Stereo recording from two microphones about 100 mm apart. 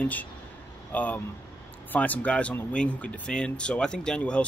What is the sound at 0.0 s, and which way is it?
Speech, 15° left (ahead or behind).